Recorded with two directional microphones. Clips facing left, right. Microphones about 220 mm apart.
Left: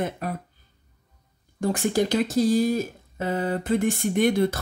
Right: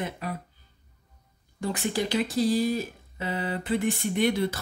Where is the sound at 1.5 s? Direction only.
45° left (ahead or behind).